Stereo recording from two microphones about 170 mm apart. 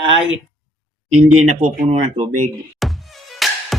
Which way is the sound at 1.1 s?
45° right (ahead or behind).